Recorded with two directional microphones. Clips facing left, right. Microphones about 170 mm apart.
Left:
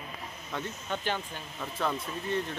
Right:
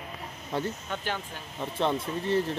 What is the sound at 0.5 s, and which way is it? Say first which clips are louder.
Speech: right 6 dB; 30° right (ahead or behind).